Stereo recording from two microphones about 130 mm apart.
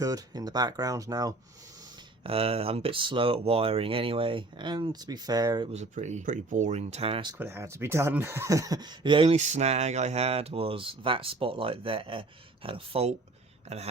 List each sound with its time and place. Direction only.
0.0 s speech: 30° right (ahead or behind)
2.2 s speech: 45° right (ahead or behind); by 5.6 s 30° right (ahead or behind)
5.7 s speech: 60° right (ahead or behind)
7.3 s speech: 15° right (ahead or behind); by 9.3 s 40° right (ahead or behind)
9.3 s speech: 60° right (ahead or behind)